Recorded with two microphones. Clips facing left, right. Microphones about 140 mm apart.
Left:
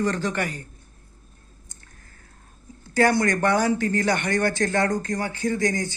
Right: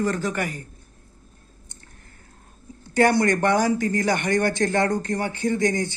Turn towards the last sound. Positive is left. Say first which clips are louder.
# right 2 dB
turn(degrees=-20)  # may be behind; listen again after turning